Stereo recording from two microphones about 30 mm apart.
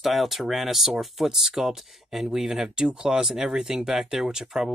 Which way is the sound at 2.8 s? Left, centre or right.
Right.